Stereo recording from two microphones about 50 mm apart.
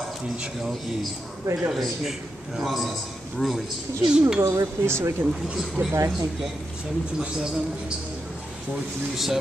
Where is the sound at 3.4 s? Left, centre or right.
Centre.